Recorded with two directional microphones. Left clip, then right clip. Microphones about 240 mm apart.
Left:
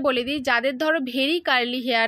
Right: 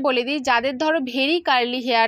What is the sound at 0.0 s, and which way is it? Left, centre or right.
A woman's voice, centre.